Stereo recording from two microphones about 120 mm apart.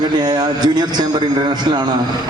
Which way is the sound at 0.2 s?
35° right (ahead or behind).